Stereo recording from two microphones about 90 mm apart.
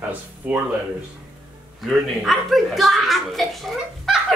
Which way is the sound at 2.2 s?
Centre (ahead or behind).